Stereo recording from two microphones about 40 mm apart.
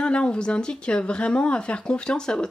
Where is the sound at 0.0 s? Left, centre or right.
Left.